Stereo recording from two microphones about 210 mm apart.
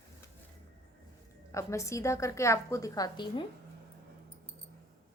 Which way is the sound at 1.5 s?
15° left (ahead or behind).